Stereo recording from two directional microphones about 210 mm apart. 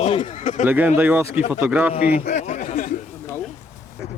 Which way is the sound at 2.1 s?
35° left (ahead or behind).